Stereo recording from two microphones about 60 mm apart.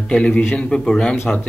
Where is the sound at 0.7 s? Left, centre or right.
Centre.